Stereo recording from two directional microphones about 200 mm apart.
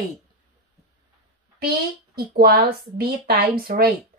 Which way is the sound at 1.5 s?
50° right (ahead or behind).